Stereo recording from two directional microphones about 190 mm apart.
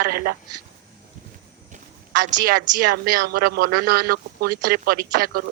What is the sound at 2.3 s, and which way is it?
Speech, 45° right (ahead or behind).